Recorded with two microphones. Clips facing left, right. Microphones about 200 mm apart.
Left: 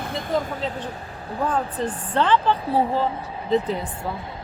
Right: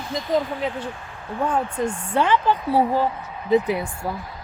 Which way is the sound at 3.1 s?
30° left (ahead or behind).